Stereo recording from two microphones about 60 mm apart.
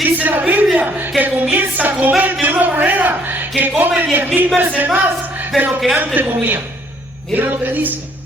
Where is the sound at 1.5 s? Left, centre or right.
Right.